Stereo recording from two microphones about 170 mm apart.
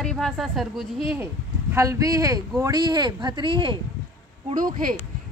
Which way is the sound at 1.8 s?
20° right (ahead or behind).